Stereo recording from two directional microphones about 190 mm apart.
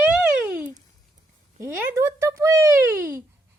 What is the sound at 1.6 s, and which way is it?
A child's voice, 15° right (ahead or behind).